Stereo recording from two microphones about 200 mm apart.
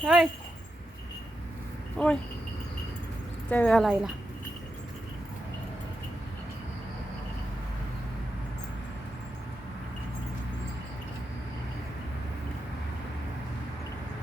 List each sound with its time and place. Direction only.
0.0 s speech: centre (ahead or behind)
2.0 s speech: 5° left (ahead or behind)
3.5 s speech: 5° left (ahead or behind)